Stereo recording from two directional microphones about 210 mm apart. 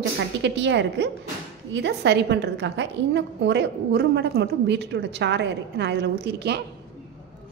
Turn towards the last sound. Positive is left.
turn(degrees=-55)  # may be behind; listen again after turning